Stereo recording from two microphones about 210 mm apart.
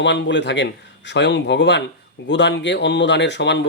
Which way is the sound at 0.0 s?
55° left (ahead or behind).